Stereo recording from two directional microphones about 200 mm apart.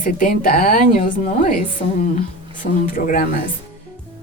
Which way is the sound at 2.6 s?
45° left (ahead or behind).